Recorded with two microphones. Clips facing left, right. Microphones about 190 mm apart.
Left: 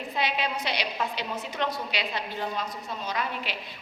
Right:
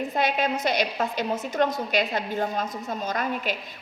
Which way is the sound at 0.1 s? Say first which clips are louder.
Right 2 dB; 45° right (ahead or behind).